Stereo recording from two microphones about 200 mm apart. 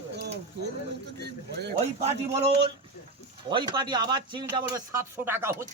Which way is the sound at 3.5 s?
20° right (ahead or behind).